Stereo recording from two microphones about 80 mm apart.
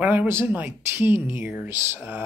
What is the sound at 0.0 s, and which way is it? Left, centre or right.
Speech, centre.